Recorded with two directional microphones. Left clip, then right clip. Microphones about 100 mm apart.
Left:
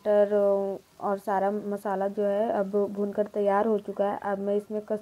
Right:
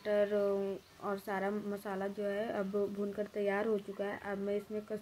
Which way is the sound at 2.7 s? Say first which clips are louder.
Left 9 dB; 15° left (ahead or behind).